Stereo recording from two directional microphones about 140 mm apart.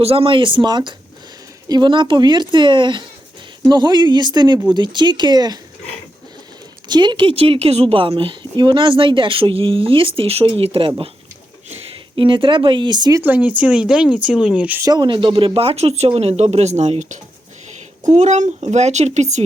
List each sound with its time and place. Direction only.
0.0 s a woman's voice: 45° right (ahead or behind)
6.8 s a woman's voice: 30° right (ahead or behind)
12.1 s a woman's voice: 35° right (ahead or behind)
13.2 s speech: 15° right (ahead or behind)
14.8 s speech: 30° right (ahead or behind); by 19.4 s 55° right (ahead or behind)